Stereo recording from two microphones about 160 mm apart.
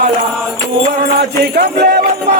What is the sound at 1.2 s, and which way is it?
Music, 85° right.